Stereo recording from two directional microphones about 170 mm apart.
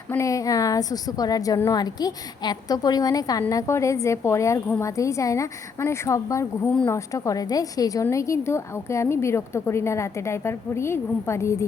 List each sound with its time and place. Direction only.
0.1 s a woman's voice: 20° left (ahead or behind)